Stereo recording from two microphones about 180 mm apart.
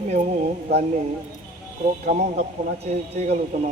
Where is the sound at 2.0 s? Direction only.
45° right (ahead or behind).